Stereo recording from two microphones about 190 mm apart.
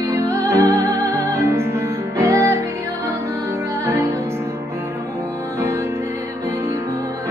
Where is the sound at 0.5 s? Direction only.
15° right (ahead or behind).